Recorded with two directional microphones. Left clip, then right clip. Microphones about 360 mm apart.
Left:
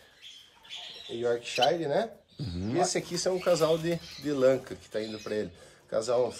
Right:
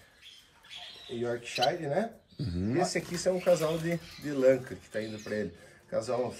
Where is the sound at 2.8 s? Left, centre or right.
Centre.